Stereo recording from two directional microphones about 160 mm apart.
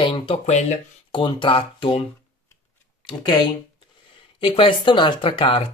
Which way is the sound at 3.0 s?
30° left (ahead or behind).